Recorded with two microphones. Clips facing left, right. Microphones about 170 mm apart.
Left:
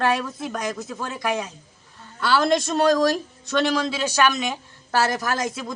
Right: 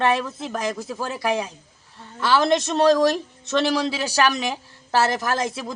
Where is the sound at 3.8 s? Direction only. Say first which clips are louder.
Even; 35° right (ahead or behind).